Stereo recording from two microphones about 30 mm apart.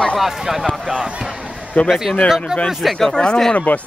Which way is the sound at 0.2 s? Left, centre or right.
Centre.